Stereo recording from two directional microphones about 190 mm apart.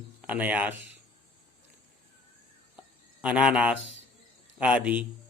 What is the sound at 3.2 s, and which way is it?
Speech, 5° right (ahead or behind).